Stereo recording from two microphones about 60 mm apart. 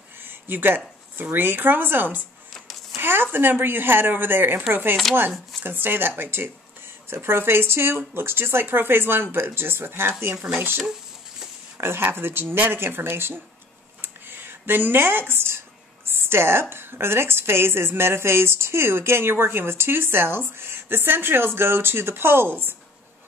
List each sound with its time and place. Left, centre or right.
0.2 s a sound: right
1.2 s a woman's voice: right
2.5 s a sound: centre
3.0 s a woman's voice: right
5.1 s speech: centre
5.6 s a woman's voice: right
11.8 s a woman's voice: right
14.0 s a sound: right
16.3 s a woman's voice: right